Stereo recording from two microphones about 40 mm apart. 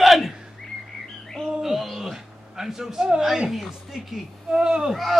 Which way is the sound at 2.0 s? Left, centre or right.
Centre.